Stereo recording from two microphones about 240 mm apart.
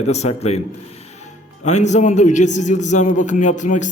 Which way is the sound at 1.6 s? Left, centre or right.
Left.